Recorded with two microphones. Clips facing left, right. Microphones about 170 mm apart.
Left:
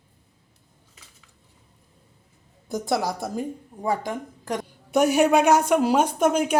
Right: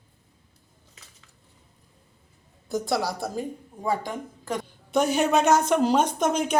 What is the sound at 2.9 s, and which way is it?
Speech, 20° left (ahead or behind).